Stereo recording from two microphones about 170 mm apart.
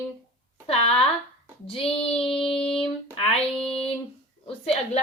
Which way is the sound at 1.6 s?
35° left (ahead or behind).